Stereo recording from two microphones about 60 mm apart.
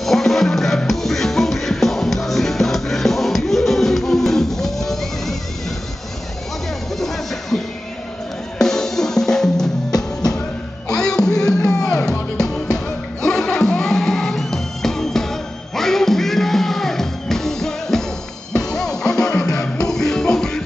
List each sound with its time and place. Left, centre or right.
0.0 s music: centre
7.0 s music: centre
8.5 s drum kit: centre
9.8 s music: left
10.9 s music: centre